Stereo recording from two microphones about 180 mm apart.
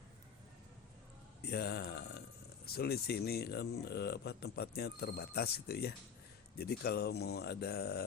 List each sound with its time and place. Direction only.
1.4 s speech: 65° left (ahead or behind)